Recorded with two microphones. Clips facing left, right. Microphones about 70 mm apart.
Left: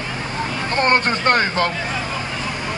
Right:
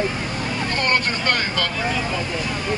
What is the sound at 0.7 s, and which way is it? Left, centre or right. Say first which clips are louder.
Speech: left 6 dB; left.